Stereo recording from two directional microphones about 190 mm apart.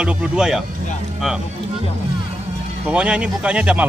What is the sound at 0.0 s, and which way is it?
Speech, 5° right (ahead or behind).